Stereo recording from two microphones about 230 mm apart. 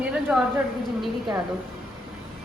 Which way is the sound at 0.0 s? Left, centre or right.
Centre.